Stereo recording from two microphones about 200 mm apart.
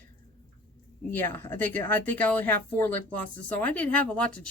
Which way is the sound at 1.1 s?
10° left (ahead or behind).